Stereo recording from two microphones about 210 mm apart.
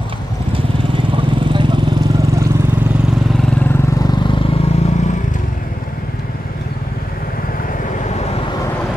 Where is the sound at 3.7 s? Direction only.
15° left (ahead or behind).